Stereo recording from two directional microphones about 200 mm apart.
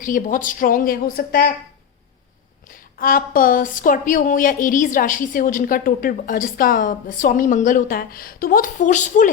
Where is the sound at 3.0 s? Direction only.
45° left (ahead or behind).